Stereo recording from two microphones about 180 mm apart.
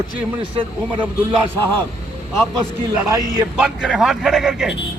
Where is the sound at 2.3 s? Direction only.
Centre (ahead or behind).